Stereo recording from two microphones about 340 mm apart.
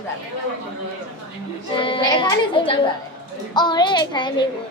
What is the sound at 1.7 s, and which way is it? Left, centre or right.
Speech, centre.